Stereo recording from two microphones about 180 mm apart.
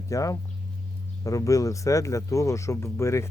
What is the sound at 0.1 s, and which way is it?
Speech, 20° left (ahead or behind).